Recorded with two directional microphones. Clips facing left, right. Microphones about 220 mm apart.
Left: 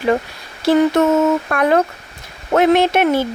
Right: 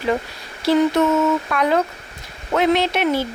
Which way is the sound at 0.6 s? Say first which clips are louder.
Left 3 dB; 50° left (ahead or behind).